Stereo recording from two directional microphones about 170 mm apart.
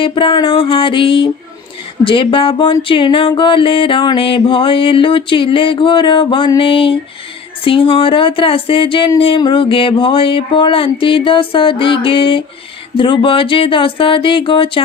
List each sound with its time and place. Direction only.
0.0 s music: 30° left (ahead or behind)